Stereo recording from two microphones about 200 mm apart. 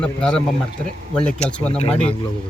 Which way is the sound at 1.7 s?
30° left (ahead or behind).